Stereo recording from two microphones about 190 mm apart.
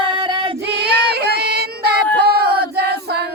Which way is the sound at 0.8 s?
60° right (ahead or behind).